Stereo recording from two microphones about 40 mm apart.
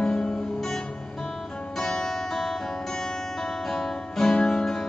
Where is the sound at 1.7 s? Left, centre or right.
Centre.